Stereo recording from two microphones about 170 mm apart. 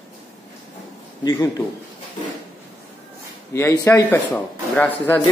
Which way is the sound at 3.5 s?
15° left (ahead or behind).